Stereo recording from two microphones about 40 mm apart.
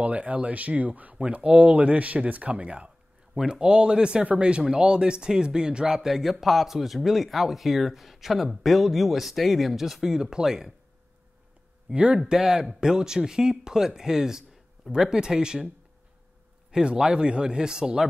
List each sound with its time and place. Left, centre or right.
0.0 s speech: right
1.1 s speech: right
3.3 s speech: centre
6.0 s speech: centre
11.9 s speech: right
12.3 s speech: centre
16.7 s speech: right